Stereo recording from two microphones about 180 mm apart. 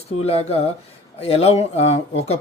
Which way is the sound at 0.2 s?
35° left (ahead or behind).